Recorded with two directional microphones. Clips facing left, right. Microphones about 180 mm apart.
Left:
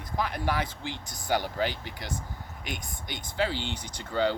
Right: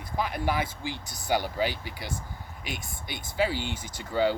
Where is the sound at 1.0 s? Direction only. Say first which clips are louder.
Even; 50° left (ahead or behind).